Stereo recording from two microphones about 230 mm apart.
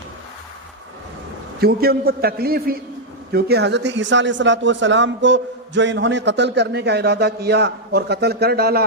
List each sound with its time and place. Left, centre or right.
1.6 s a man's voice: right